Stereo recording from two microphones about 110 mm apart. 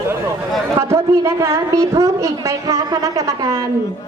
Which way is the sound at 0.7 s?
25° right (ahead or behind).